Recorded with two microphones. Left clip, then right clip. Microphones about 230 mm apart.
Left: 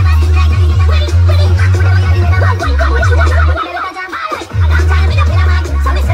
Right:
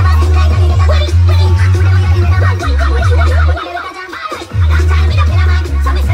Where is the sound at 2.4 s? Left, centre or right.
Left.